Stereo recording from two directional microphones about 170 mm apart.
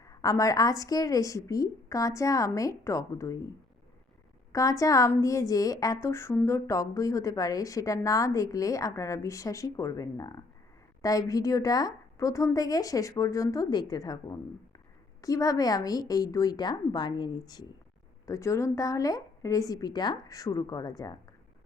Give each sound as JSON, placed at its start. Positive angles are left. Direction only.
{"t": 0.0, "sound": "a woman's voice", "side_deg": 20}
{"t": 4.5, "sound": "a woman's voice", "side_deg": 20}